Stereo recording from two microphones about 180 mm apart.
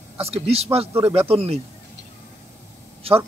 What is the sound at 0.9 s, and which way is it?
Speech, 15° right (ahead or behind).